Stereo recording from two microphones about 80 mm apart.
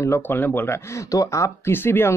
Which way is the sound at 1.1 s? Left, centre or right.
Left.